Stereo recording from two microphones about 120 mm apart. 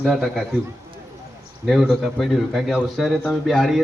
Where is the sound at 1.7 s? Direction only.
5° right (ahead or behind).